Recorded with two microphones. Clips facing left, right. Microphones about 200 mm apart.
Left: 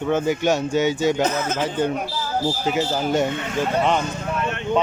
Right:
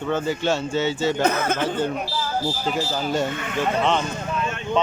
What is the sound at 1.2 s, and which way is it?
Speech, 60° right (ahead or behind).